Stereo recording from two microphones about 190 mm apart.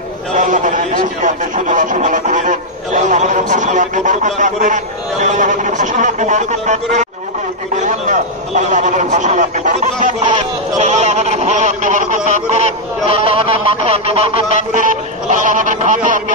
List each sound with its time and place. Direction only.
0.4 s speech: 40° right (ahead or behind)